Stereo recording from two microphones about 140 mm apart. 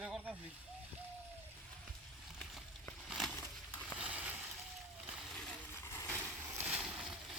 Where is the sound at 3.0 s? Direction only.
Centre (ahead or behind).